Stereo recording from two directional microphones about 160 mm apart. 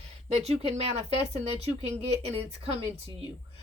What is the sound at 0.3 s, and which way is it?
Speech, 40° right (ahead or behind).